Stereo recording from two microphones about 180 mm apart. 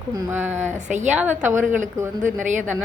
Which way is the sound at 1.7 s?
45° right (ahead or behind).